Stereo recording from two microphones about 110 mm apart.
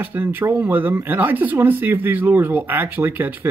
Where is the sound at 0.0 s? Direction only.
20° right (ahead or behind).